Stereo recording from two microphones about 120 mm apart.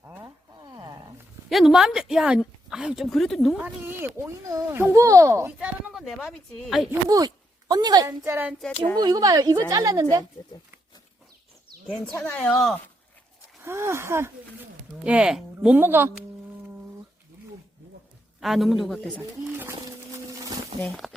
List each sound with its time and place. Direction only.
0.6 s a sound: 35° right (ahead or behind)
1.5 s a woman's voice: centre (ahead or behind)
3.6 s speech: 15° right (ahead or behind)
5.5 s a woman's voice: 10° right (ahead or behind)
7.1 s speech: 30° right (ahead or behind)
8.0 s speech: 20° right (ahead or behind)
9.0 s speech: 35° right (ahead or behind)
12.1 s a woman's voice: 10° left (ahead or behind)
13.6 s speech: 20° right (ahead or behind)
15.0 s speech: 5° right (ahead or behind)
15.8 s speech: 20° right (ahead or behind)
18.3 s a woman's voice: centre (ahead or behind)
20.7 s speech: 65° right (ahead or behind)